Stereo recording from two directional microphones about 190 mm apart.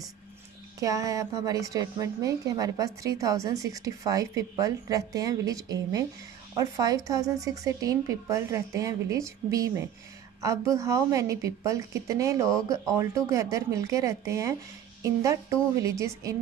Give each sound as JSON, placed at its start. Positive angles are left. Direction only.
{"t": 0.7, "sound": "a woman's voice", "side_deg": -15}